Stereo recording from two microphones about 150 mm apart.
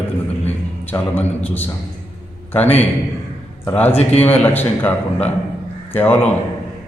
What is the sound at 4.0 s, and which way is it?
Speech, 45° left (ahead or behind).